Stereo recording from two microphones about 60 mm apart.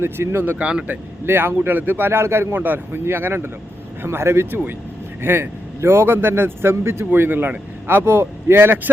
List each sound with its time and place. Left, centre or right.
0.0 s speech: right
0.6 s speech: centre
1.2 s a man's voice: right
2.6 s a man's voice: right